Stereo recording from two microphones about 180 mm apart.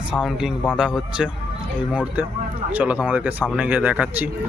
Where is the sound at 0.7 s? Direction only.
5° right (ahead or behind).